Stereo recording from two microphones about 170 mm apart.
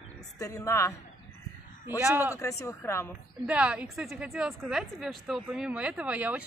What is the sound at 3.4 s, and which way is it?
A woman's voice, 5° right (ahead or behind).